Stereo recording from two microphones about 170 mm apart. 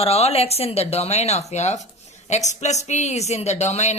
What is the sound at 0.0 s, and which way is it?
Speech, 35° left (ahead or behind).